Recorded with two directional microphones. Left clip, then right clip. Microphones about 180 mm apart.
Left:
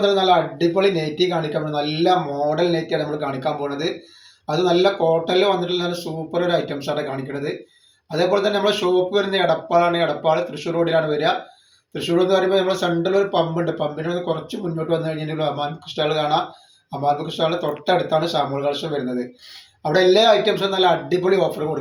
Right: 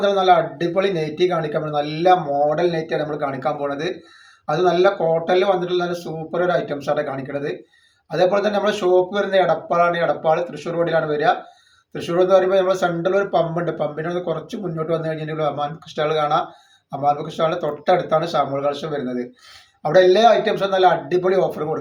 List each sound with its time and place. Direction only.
0.0 s speech: 15° right (ahead or behind)